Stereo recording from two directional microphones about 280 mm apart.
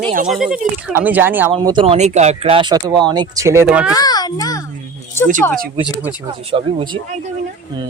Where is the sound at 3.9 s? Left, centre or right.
Centre.